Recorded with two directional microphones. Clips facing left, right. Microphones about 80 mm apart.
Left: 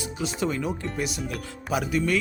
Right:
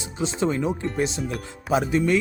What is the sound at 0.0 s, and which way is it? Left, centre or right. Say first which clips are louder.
Music: right 2 dB; right.